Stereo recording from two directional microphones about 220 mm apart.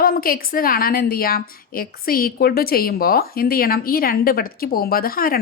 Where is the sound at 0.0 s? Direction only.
40° left (ahead or behind).